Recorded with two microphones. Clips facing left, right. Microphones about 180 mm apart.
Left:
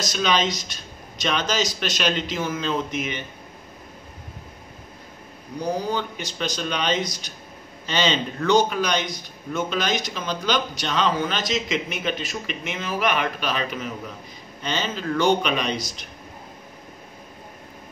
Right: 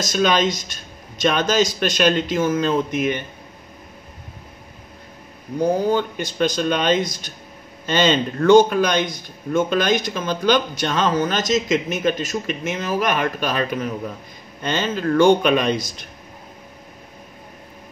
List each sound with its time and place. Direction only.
0.0 s a man's voice: 50° right (ahead or behind)
5.6 s a man's voice: 50° right (ahead or behind)